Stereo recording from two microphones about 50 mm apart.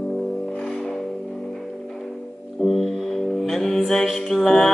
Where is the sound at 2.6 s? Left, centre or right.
Centre.